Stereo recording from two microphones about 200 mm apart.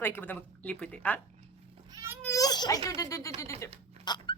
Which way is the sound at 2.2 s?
15° left (ahead or behind).